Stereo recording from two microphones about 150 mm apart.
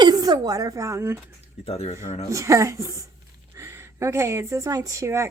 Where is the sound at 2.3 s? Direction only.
20° right (ahead or behind).